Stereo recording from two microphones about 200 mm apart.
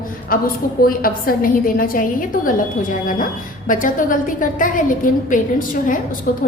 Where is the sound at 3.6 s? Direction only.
40° left (ahead or behind).